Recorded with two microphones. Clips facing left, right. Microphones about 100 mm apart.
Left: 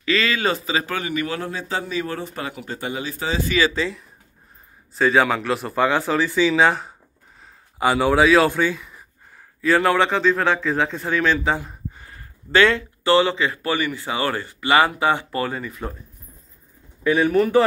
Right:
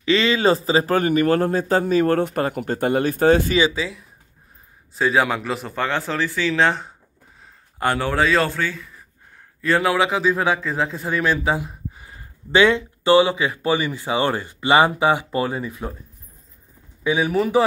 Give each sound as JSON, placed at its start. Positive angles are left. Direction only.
{"t": 0.0, "sound": "speech", "side_deg": -25}
{"t": 3.7, "sound": "speech", "side_deg": -5}
{"t": 9.6, "sound": "speech", "side_deg": 0}
{"t": 17.0, "sound": "speech", "side_deg": -15}